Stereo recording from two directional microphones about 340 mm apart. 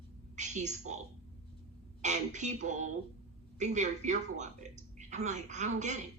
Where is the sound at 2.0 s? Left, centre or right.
Right.